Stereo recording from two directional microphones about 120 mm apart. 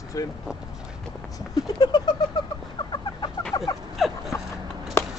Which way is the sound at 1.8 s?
35° left (ahead or behind).